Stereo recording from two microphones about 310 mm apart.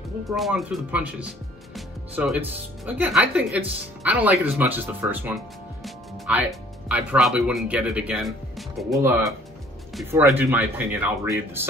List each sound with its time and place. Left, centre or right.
0.3 s speech: centre
5.9 s music: centre
6.9 s speech: centre